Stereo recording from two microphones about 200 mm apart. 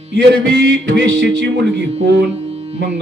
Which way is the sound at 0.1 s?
55° right (ahead or behind).